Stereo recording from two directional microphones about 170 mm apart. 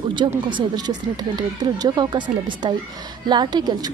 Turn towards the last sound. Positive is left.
turn(degrees=-25)  # may be behind; listen again after turning